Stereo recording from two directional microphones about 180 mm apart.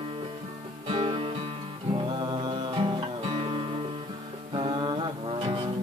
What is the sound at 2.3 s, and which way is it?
Music, 25° right (ahead or behind).